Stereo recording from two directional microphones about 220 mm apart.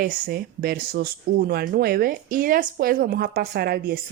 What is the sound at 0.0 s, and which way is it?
Speech, 45° right (ahead or behind).